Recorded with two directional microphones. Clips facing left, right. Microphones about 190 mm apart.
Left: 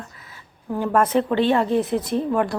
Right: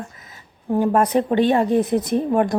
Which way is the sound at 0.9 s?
15° right (ahead or behind).